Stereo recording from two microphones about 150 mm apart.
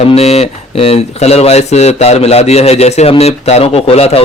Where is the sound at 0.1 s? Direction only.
45° left (ahead or behind).